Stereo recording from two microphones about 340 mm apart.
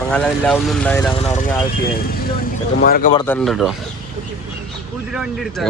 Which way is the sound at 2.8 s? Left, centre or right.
Left.